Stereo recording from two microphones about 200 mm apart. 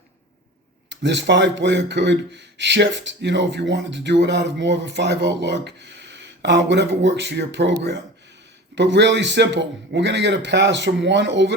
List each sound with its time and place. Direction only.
0.9 s speech: 60° right (ahead or behind)